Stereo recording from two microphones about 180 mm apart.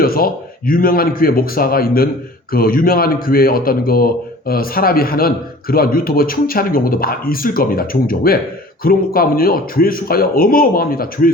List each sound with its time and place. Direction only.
0.0 s speech: 55° left (ahead or behind)